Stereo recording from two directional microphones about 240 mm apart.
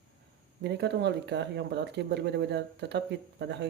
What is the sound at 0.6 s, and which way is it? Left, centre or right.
Speech, right.